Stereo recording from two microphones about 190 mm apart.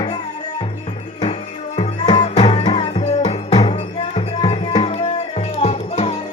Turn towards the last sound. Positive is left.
turn(degrees=35)  # may be behind; listen again after turning